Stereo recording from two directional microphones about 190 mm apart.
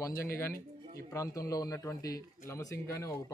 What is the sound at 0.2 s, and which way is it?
A man's voice, 15° left (ahead or behind).